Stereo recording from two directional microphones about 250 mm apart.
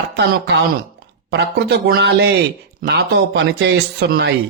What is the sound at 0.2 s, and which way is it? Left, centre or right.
Speech, right.